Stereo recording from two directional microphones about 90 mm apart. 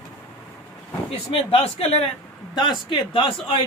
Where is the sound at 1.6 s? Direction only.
90° left.